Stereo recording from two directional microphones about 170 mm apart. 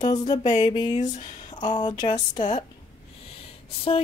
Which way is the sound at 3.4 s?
35° left (ahead or behind).